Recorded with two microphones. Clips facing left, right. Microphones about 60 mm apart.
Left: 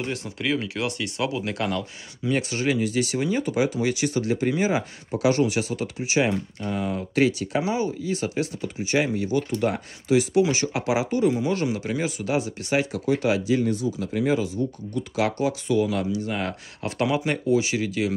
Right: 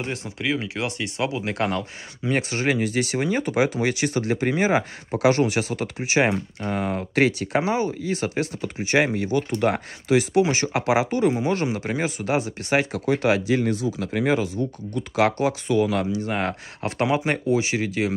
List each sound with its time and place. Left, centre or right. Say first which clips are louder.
0.0 s speech: even; right
11.3 s speech: right 1 dB; right
13.7 s speech: right 1 dB; right